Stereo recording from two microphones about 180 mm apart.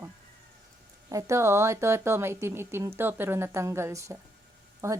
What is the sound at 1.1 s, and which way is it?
Speech, 15° right (ahead or behind).